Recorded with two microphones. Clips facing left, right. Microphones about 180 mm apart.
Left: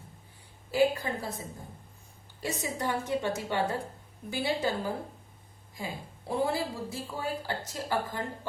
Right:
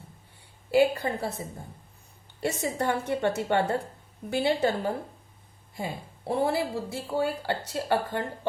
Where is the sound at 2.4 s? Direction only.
65° right (ahead or behind).